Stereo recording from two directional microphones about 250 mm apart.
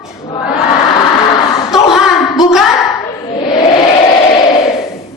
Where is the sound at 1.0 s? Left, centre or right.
Centre.